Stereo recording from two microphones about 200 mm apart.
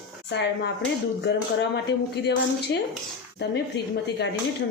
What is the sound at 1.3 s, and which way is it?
Speech, 60° left (ahead or behind).